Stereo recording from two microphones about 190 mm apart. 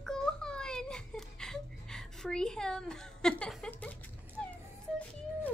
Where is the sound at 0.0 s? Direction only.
5° left (ahead or behind).